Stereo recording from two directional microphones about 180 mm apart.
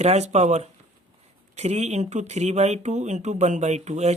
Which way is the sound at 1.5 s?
35° right (ahead or behind).